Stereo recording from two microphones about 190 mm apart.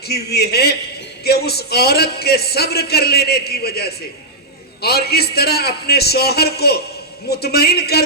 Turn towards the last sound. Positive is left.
turn(degrees=55)  # may be behind; listen again after turning